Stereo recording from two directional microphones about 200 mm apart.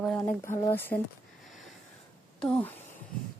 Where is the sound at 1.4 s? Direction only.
Centre (ahead or behind).